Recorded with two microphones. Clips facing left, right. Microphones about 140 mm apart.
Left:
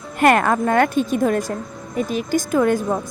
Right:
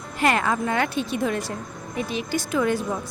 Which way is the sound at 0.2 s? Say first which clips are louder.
Left 6 dB; 55° left (ahead or behind).